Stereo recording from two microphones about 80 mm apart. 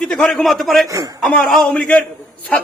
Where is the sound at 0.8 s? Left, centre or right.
Right.